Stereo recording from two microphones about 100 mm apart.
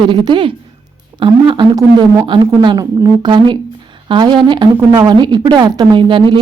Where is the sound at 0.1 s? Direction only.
55° right (ahead or behind).